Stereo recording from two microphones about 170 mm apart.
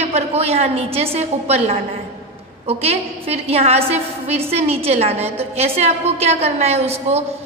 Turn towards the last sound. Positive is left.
turn(degrees=-35)  # may be behind; listen again after turning